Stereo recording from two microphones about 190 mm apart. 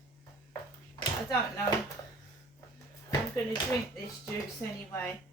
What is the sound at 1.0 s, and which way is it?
Speech, 20° left (ahead or behind).